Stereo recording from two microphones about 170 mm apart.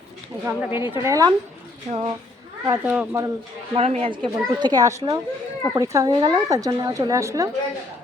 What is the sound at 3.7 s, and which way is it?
A woman's voice, 40° right (ahead or behind).